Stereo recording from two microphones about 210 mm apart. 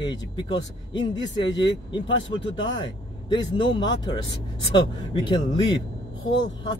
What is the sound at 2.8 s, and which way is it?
Speech, 20° left (ahead or behind).